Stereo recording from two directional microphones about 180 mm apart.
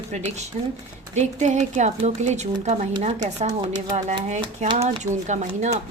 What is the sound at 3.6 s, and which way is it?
Speech, 25° right (ahead or behind).